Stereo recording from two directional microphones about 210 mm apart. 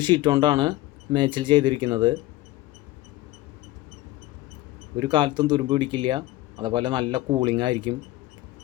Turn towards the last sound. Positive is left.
turn(degrees=-20)  # may be behind; listen again after turning